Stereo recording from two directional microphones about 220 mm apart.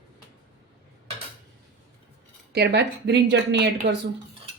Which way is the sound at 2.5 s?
50° right (ahead or behind).